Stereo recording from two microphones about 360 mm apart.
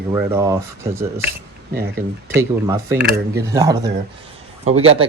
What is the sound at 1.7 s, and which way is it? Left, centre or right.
Speech, right.